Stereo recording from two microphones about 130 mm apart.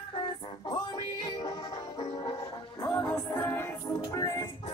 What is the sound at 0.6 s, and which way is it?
Music, 30° left (ahead or behind).